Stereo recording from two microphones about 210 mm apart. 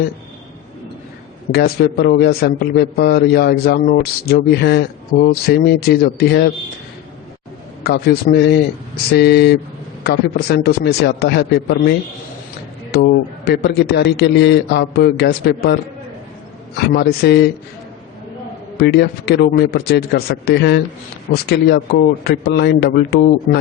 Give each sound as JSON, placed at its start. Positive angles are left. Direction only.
{"t": 1.5, "sound": "a man's voice", "side_deg": 45}
{"t": 7.9, "sound": "a man's voice", "side_deg": 45}
{"t": 18.8, "sound": "a man's voice", "side_deg": 50}